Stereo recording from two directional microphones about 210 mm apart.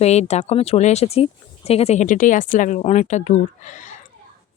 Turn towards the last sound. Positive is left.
turn(degrees=35)  # may be behind; listen again after turning